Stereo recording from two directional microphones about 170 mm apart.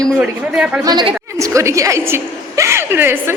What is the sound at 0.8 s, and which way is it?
A woman's voice, 25° right (ahead or behind).